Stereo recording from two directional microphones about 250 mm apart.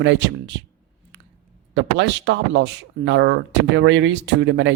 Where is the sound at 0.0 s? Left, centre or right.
Right.